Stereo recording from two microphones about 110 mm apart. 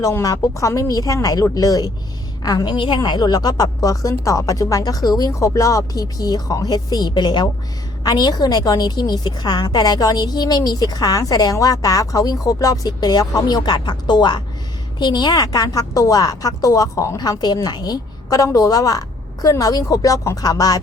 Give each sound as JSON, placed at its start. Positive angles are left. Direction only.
{"t": 0.0, "sound": "a woman's voice", "side_deg": 30}